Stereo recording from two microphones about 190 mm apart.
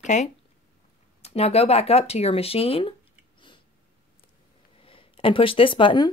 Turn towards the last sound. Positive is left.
turn(degrees=25)  # may be behind; listen again after turning